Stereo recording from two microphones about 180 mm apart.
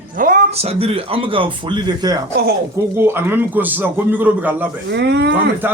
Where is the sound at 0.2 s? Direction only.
50° right (ahead or behind).